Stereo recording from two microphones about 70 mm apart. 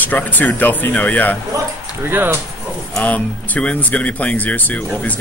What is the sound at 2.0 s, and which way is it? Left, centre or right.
Speech, right.